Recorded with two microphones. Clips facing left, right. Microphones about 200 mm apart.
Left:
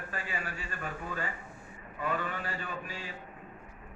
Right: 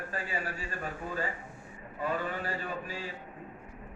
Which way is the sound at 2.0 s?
35° right (ahead or behind).